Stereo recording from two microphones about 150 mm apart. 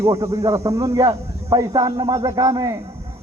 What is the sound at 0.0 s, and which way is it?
A man's voice, 20° right (ahead or behind).